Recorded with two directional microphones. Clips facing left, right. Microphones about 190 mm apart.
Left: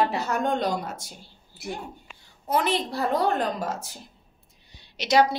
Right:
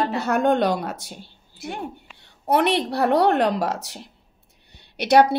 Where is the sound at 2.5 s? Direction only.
65° right (ahead or behind).